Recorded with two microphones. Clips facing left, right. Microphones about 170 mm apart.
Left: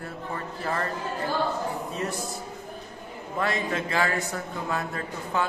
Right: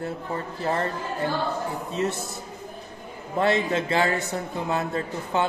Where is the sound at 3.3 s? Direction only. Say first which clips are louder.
Right 5 dB; 30° right (ahead or behind).